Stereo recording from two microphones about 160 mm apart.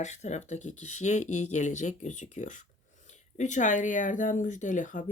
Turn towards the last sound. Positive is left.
turn(degrees=50)  # may be behind; listen again after turning